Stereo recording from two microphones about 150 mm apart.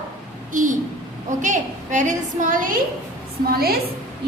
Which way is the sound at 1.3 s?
55° right (ahead or behind).